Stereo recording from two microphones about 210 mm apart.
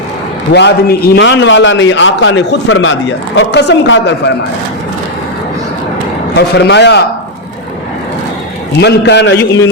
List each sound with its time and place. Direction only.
0.5 s a man's voice: 50° left (ahead or behind)
6.3 s a man's voice: 55° left (ahead or behind)
8.8 s a man's voice: 55° left (ahead or behind)